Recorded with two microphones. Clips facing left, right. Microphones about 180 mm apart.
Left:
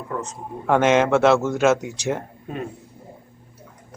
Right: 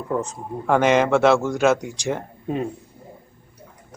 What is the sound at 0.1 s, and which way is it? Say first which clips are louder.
Speech: right 5 dB; 30° right (ahead or behind).